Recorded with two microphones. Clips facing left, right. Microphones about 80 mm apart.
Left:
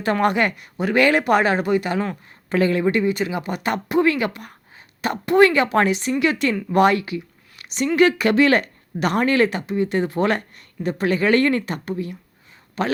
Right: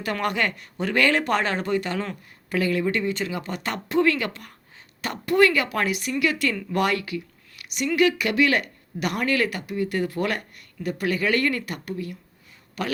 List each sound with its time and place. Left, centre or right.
0.0 s speech: left
2.5 s speech: left